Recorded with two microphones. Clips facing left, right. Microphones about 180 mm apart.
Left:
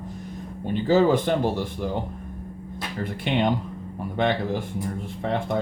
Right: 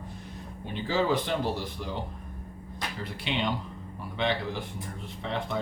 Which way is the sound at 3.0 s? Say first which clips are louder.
Left 8 dB; 50° left (ahead or behind).